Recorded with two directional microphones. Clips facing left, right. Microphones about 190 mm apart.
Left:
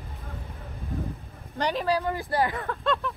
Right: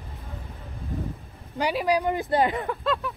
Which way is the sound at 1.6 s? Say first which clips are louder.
Right 2 dB; 10° right (ahead or behind).